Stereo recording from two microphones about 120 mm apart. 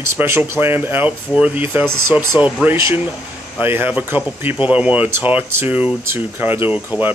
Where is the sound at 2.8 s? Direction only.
25° right (ahead or behind).